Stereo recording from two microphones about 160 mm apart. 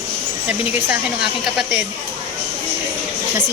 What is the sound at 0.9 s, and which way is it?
Speech, 5° right (ahead or behind).